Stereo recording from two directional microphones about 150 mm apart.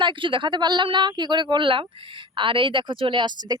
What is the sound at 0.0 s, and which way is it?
Speech, 35° right (ahead or behind).